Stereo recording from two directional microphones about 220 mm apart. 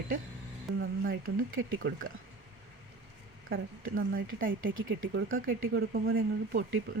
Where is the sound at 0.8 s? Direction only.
40° right (ahead or behind).